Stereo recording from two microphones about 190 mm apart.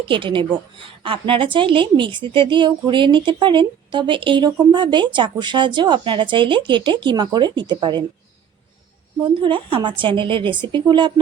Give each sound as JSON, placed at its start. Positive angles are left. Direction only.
{"t": 0.1, "sound": "a woman's voice", "side_deg": -25}
{"t": 9.2, "sound": "a woman's voice", "side_deg": -25}